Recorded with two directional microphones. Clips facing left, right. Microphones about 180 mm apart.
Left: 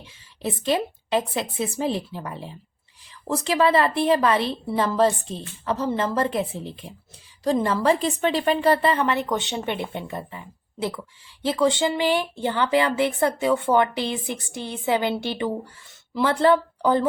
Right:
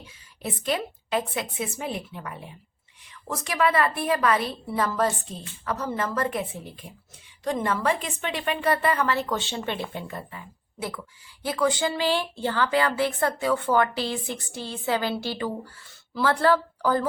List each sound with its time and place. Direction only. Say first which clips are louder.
0.0 s a woman's voice: left 5 dB; 25° left (ahead or behind)